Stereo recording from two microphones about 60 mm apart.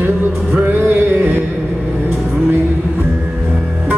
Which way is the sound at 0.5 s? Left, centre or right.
Right.